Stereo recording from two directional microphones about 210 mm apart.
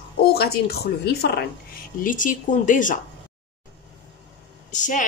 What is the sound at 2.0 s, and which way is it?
A woman's voice, 40° left (ahead or behind).